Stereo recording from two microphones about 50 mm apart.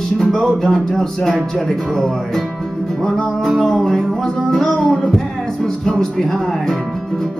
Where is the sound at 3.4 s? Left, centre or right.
Centre.